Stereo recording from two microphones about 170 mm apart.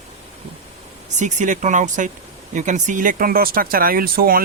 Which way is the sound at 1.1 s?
45° right (ahead or behind).